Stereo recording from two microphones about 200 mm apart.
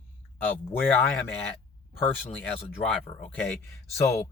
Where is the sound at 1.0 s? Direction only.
10° left (ahead or behind).